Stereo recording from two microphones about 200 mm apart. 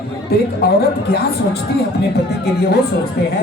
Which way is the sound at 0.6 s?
50° left (ahead or behind).